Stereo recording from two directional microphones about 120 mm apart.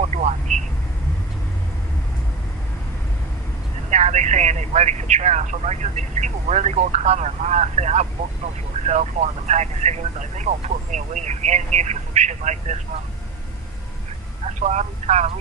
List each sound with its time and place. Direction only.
0.0 s a sound: 75° right (ahead or behind)
3.8 s speech: 70° right (ahead or behind)
14.4 s telephone: 70° right (ahead or behind)